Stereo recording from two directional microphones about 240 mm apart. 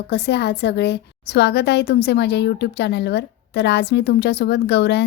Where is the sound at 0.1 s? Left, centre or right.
Left.